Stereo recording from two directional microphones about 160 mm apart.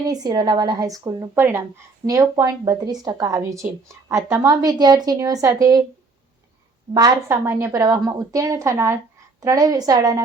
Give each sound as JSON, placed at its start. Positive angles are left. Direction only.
{"t": 0.0, "sound": "a woman's voice", "side_deg": -25}
{"t": 6.9, "sound": "a woman's voice", "side_deg": -25}